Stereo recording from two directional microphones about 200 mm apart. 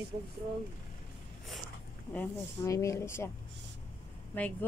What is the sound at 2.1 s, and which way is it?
Speech, 10° left (ahead or behind).